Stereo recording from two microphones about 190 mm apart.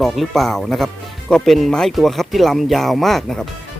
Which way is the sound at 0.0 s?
Centre (ahead or behind).